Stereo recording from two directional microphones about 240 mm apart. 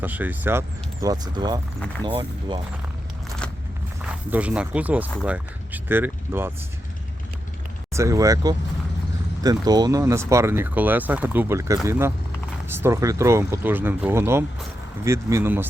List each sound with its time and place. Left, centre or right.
0.0 s speech: centre
4.0 s speech: centre
7.9 s speech: centre